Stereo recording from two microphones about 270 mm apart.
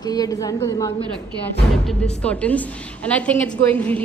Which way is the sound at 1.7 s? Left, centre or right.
Centre.